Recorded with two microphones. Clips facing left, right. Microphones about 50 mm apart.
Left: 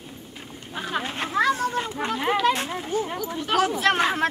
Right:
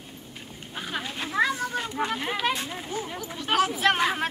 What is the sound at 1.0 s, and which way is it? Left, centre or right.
Children playing, left.